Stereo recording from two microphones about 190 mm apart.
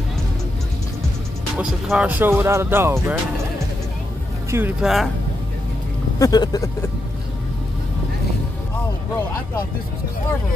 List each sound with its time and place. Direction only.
1.6 s speech: 5° right (ahead or behind)
4.5 s speech: 10° right (ahead or behind)
6.1 s speech: 20° left (ahead or behind)